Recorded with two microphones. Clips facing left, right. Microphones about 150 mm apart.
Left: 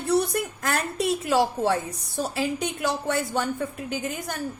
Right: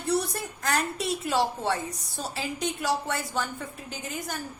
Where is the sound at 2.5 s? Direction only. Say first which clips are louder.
Left 1 dB; 60° left (ahead or behind).